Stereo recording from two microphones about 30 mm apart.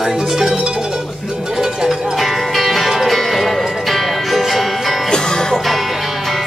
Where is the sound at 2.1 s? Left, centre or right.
Centre.